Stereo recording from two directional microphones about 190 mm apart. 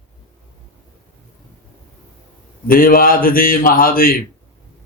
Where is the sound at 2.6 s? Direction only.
50° left (ahead or behind).